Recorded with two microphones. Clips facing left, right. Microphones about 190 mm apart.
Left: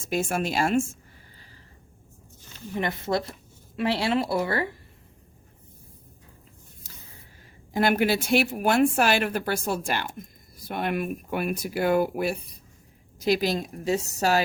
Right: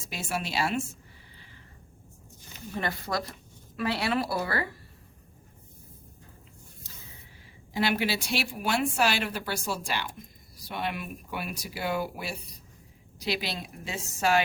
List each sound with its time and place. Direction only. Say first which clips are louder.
0.0 s a woman's voice: left 7 dB; 50° left (ahead or behind)
2.7 s speech: left 5 dB; 20° left (ahead or behind)
7.7 s a woman's voice: left 5 dB; 50° left (ahead or behind)